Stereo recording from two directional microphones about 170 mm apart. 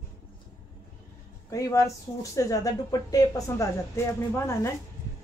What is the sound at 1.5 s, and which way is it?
Speech, 20° left (ahead or behind).